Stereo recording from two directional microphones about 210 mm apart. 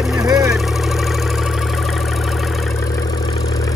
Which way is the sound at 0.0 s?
Centre (ahead or behind).